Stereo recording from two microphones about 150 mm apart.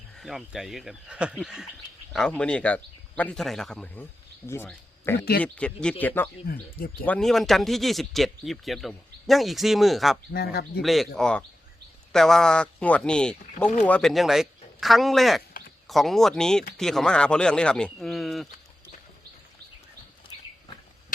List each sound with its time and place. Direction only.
0.2 s speech: centre (ahead or behind)
2.1 s speech: 5° left (ahead or behind)
6.5 s speech: 75° left (ahead or behind)
7.0 s speech: 5° left (ahead or behind)
10.3 s speech: 90° left
10.8 s speech: centre (ahead or behind)